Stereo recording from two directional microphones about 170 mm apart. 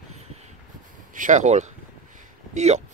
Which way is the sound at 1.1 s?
45° right (ahead or behind).